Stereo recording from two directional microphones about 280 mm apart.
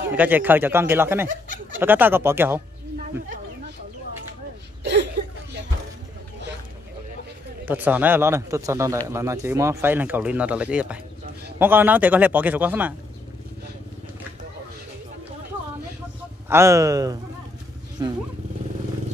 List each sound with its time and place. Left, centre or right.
0.1 s speech: centre
4.8 s a sound: right
7.6 s a man's voice: centre
16.4 s speech: centre